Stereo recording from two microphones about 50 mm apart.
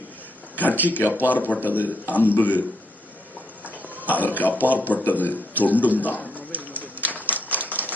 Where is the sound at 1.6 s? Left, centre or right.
Right.